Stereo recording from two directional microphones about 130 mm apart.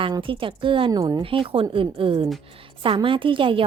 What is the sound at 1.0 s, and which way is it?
Speech, 30° right (ahead or behind).